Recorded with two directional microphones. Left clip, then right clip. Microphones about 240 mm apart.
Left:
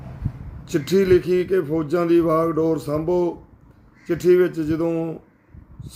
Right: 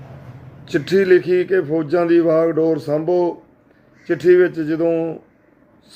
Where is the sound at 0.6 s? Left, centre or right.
Centre.